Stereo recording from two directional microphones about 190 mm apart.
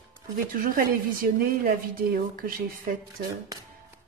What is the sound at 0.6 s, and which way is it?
A woman's voice, 50° right (ahead or behind).